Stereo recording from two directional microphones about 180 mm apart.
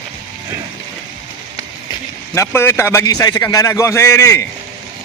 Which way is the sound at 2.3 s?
15° left (ahead or behind).